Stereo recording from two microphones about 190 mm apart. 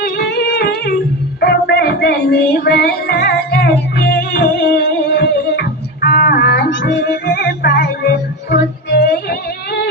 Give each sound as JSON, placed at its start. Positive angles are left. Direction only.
{"t": 0.0, "sound": "music", "side_deg": 60}